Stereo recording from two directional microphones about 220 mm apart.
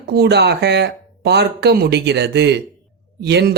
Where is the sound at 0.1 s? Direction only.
50° right (ahead or behind).